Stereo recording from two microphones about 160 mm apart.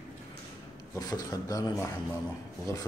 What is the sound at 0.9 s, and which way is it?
Speech, 25° left (ahead or behind).